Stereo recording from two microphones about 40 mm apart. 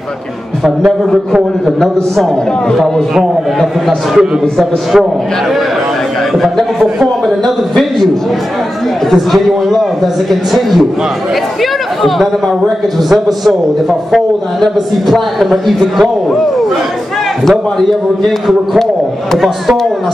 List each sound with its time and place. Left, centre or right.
0.7 s a man's voice: centre
4.1 s a man's voice: centre
6.4 s a man's voice: centre
9.1 s a man's voice: centre
14.6 s a man's voice: centre
17.5 s a man's voice: centre